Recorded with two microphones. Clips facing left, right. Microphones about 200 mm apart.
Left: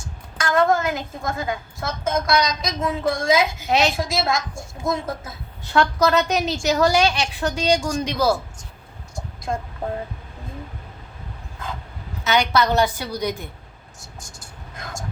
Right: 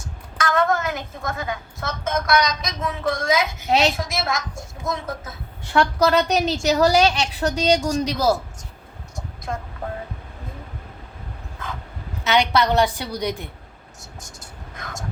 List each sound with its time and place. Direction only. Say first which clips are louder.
0.3 s a woman's voice: left 2 dB; 30° left (ahead or behind)
3.7 s a woman's voice: right 2 dB; 35° right (ahead or behind)
4.0 s a woman's voice: left 3 dB; 30° left (ahead or behind)
5.8 s a woman's voice: right 1 dB; 30° right (ahead or behind)
9.1 s vehicle: left 3 dB; 30° left (ahead or behind)
12.2 s a woman's voice: even; 30° right (ahead or behind)